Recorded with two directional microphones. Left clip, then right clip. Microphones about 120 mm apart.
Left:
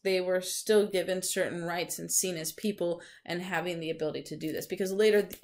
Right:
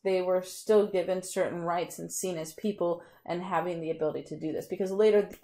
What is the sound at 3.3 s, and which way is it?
A woman's voice, 15° left (ahead or behind).